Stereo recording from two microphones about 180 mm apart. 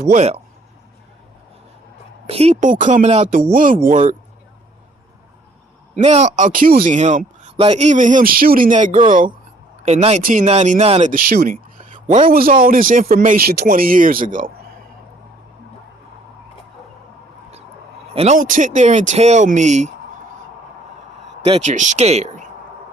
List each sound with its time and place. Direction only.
0.1 s speech: 40° right (ahead or behind)
2.2 s speech: 35° right (ahead or behind)
5.9 s speech: 40° right (ahead or behind)
18.1 s speech: 35° right (ahead or behind)
18.4 s speech: 45° right (ahead or behind)
21.5 s speech: 40° right (ahead or behind)